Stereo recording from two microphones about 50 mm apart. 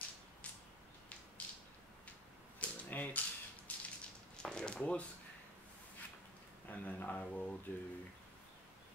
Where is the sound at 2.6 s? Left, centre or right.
Left.